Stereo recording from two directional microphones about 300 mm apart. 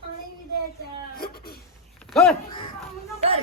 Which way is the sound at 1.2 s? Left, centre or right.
Left.